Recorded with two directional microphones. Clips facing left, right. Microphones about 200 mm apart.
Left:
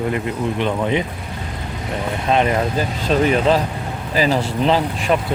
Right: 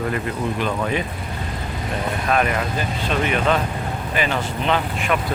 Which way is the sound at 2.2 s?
25° left (ahead or behind).